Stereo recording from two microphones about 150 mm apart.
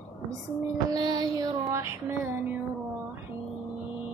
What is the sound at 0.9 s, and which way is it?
Female singing, 30° right (ahead or behind).